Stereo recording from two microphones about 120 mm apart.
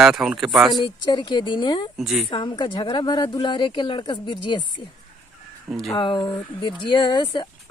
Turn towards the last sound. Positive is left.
turn(degrees=40)  # may be behind; listen again after turning